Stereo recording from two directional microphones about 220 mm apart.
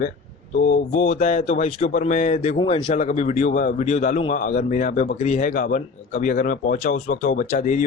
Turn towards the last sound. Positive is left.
turn(degrees=35)  # may be behind; listen again after turning